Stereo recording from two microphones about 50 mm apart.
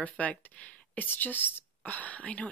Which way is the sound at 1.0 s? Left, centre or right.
Left.